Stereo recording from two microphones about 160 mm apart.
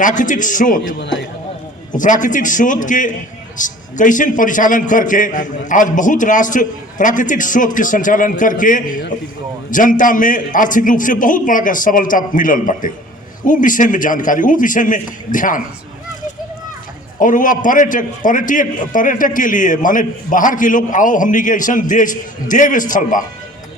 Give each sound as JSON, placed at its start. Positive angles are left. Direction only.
{"t": 0.0, "sound": "a man's voice", "side_deg": 55}
{"t": 2.0, "sound": "a man's voice", "side_deg": 55}
{"t": 17.2, "sound": "a man's voice", "side_deg": 55}